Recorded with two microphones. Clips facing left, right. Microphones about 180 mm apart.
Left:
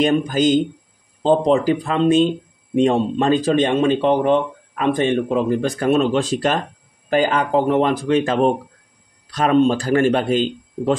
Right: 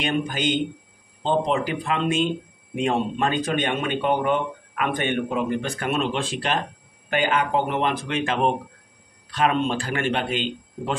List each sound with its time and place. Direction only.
0.0 s speech: 40° left (ahead or behind)